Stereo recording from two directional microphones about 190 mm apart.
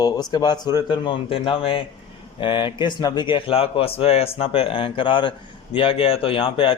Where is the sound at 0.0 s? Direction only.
20° left (ahead or behind).